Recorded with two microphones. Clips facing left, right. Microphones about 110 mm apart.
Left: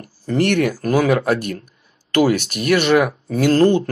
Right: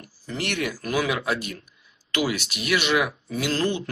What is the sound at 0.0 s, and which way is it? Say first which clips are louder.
Speech: left 13 dB; 45° left (ahead or behind).